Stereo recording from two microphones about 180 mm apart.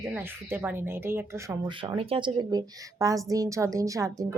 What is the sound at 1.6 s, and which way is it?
Speech, 25° right (ahead or behind).